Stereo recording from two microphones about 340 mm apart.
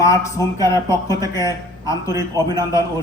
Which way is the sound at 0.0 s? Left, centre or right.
Centre.